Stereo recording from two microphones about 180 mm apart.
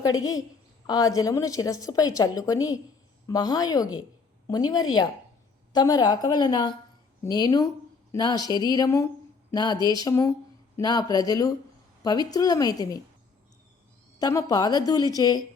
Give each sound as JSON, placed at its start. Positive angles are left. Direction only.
{"t": 0.2, "sound": "a woman's voice", "side_deg": 20}
{"t": 14.2, "sound": "a woman's voice", "side_deg": 20}